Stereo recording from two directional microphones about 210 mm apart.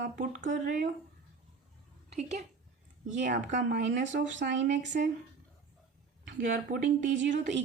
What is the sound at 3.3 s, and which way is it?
Speech, 55° right (ahead or behind).